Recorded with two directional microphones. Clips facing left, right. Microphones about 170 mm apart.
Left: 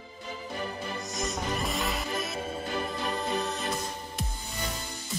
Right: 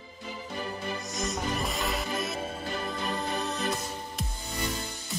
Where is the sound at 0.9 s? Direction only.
Centre (ahead or behind).